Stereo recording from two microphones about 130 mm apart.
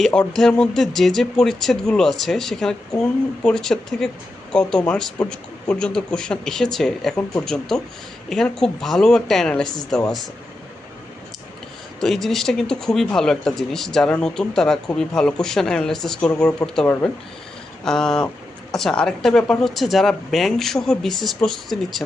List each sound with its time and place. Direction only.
0.0 s speech: 5° left (ahead or behind)
11.9 s speech: 5° left (ahead or behind)
16.8 s speech: 15° left (ahead or behind)
17.8 s speech: 5° left (ahead or behind)